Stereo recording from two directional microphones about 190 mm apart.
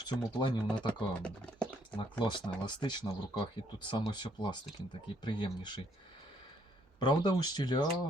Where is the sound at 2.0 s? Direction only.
25° left (ahead or behind).